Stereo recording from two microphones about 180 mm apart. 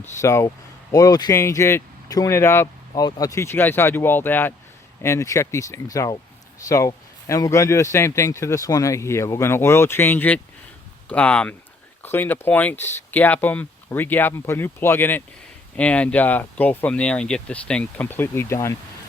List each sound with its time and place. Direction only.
0.0 s speech: 15° left (ahead or behind)